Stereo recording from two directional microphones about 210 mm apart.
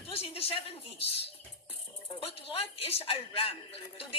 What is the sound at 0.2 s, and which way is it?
Speech, 25° left (ahead or behind).